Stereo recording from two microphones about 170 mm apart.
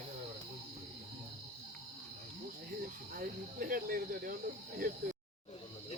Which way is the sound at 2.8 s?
60° right (ahead or behind).